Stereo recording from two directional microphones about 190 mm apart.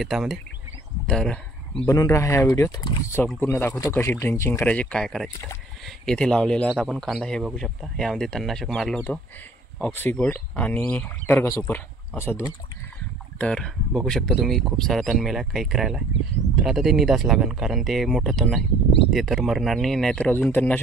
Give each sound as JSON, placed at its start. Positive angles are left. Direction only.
{"t": 0.0, "sound": "speech", "side_deg": 0}
{"t": 1.9, "sound": "speech", "side_deg": 15}